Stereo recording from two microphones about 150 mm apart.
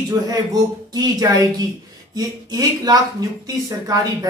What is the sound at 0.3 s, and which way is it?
A woman's voice, 25° right (ahead or behind).